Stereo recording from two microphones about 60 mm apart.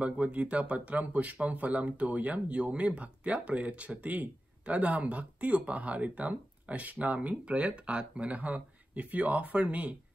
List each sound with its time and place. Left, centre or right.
0.0 s speech: right